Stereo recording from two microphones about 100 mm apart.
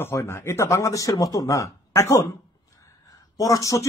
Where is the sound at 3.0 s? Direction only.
35° left (ahead or behind).